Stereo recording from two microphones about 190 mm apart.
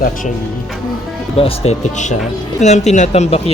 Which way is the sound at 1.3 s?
30° left (ahead or behind).